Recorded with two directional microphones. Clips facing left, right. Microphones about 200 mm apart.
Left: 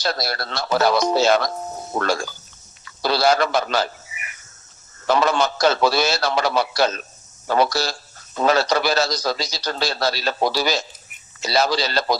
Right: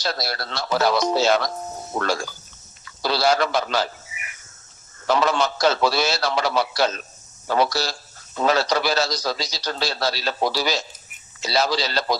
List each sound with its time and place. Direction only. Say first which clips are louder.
0.0 s a man's voice: left 2 dB; 50° left (ahead or behind)
5.0 s a man's voice: left 2 dB; 50° left (ahead or behind)